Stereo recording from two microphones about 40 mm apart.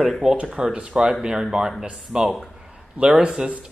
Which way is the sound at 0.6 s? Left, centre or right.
Right.